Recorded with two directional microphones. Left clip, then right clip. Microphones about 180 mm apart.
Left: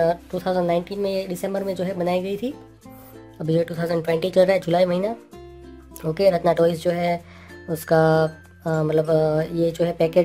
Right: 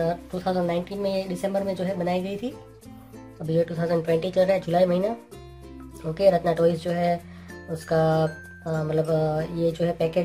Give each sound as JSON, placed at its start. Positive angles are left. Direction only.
{"t": 0.0, "sound": "speech", "side_deg": 45}